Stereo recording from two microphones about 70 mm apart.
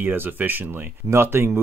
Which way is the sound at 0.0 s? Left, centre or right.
Right.